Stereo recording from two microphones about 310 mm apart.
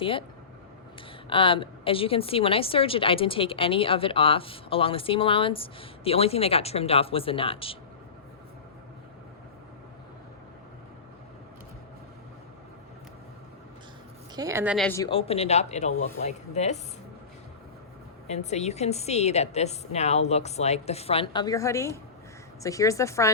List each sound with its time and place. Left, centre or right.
0.0 s a woman's voice: centre
1.3 s a woman's voice: centre
14.3 s a woman's voice: centre; by 15.9 s left
15.9 s speech: left
16.2 s a woman's voice: left
18.3 s a woman's voice: left